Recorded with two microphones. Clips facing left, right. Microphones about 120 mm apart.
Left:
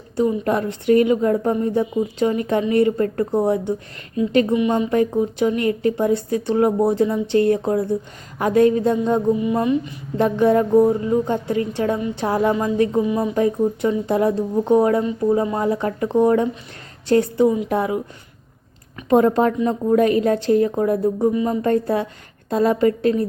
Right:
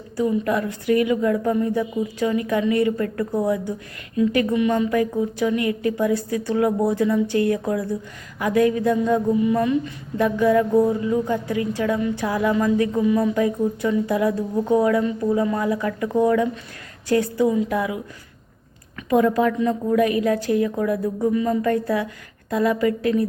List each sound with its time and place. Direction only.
0.2 s a woman's voice: 30° left (ahead or behind)
19.1 s a woman's voice: 35° left (ahead or behind)